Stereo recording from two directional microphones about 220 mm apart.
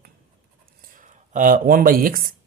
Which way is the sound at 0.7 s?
35° right (ahead or behind).